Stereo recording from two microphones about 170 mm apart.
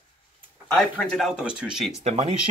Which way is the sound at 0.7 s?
5° left (ahead or behind).